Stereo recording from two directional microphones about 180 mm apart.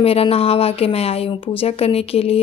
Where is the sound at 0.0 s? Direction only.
30° left (ahead or behind).